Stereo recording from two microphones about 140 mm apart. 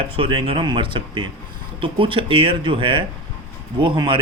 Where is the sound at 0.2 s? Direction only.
40° right (ahead or behind).